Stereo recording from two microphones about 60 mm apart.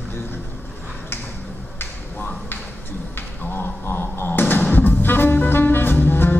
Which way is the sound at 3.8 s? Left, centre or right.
Left.